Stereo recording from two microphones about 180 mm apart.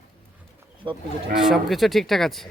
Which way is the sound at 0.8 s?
25° right (ahead or behind).